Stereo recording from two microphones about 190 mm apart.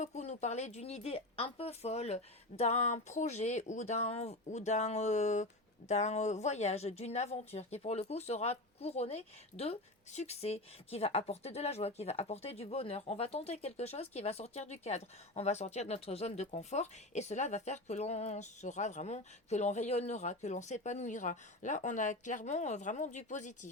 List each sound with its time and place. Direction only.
0.0 s a woman's voice: 35° left (ahead or behind)